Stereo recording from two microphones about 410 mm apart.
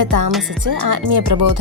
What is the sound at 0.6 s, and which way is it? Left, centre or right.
Speech, right.